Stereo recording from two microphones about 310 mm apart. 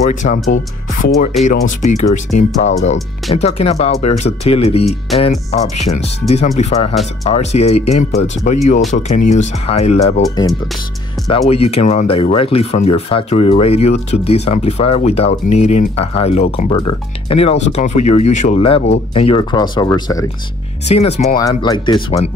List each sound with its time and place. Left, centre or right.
0.1 s speech: left
21.4 s speech: centre